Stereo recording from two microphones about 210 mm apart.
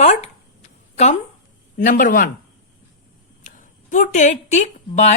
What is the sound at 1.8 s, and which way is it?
Speech, 40° left (ahead or behind).